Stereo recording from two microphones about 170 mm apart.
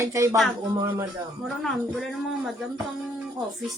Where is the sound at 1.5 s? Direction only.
Centre (ahead or behind).